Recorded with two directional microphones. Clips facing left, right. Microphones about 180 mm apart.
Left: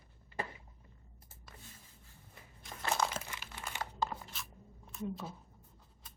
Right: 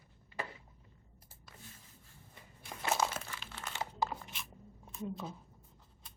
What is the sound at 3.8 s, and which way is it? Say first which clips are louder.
Tearing: right 1 dB; 15° right (ahead or behind).